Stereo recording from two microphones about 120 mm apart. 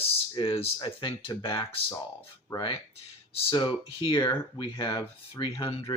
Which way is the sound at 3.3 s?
50° left (ahead or behind).